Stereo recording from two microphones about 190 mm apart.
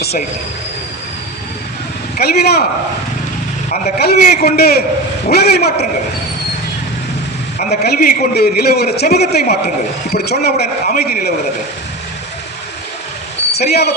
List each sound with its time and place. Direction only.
0.0 s a sound: 55° left (ahead or behind)
2.1 s speech: 55° left (ahead or behind)
3.9 s a man's voice: 55° left (ahead or behind)
7.6 s a man's voice: 45° left (ahead or behind)
13.5 s speech: 55° left (ahead or behind)